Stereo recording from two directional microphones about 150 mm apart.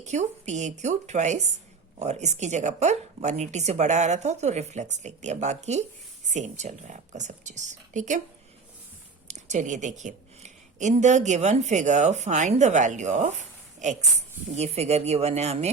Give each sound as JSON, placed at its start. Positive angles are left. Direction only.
{"t": 0.0, "sound": "a woman's voice", "side_deg": -50}
{"t": 9.2, "sound": "a woman's voice", "side_deg": -55}